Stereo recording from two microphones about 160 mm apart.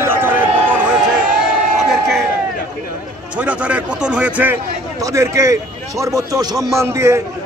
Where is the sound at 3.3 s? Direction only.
10° right (ahead or behind).